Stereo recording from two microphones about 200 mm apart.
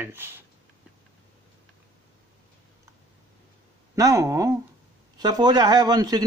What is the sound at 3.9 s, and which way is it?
A man's voice, 15° right (ahead or behind).